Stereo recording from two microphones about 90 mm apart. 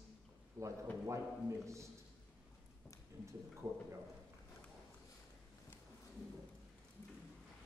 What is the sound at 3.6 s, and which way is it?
Speech, 35° right (ahead or behind).